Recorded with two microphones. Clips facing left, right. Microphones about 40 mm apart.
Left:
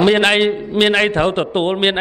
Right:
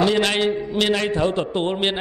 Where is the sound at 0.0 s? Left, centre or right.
Left.